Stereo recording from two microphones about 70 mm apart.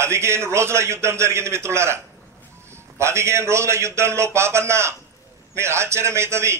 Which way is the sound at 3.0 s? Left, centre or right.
Right.